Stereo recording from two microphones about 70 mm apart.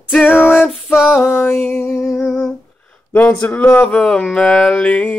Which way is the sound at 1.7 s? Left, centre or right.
Left.